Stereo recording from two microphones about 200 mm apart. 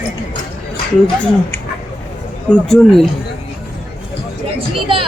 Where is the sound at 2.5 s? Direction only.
Centre (ahead or behind).